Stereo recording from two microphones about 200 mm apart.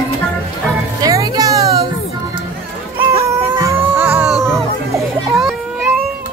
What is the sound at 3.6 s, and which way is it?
Music, 10° right (ahead or behind).